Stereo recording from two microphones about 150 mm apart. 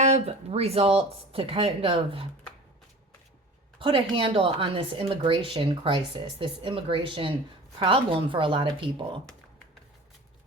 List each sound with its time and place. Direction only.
0.0 s speech: 45° right (ahead or behind)
3.8 s speech: 35° right (ahead or behind)